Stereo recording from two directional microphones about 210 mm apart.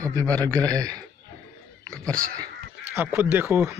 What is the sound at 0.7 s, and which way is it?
Speech, 15° right (ahead or behind).